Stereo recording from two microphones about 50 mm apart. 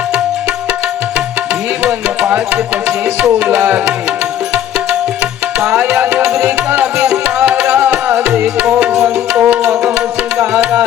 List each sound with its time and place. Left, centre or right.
1.8 s music: right
5.8 s music: right
8.9 s music: centre